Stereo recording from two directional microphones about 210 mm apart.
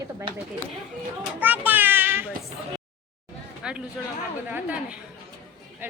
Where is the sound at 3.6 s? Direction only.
5° right (ahead or behind).